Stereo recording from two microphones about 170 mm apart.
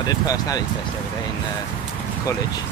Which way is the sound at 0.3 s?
20° left (ahead or behind).